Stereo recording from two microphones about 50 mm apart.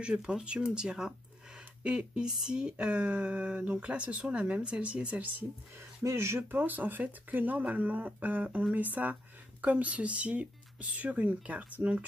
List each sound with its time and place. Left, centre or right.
0.0 s speech: centre
5.8 s speech: right
6.5 s speech: right